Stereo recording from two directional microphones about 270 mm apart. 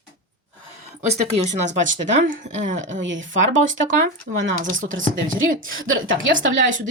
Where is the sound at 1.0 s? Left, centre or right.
Right.